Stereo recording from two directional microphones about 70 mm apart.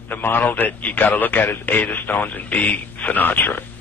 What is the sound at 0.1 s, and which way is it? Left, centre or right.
A man's voice, left.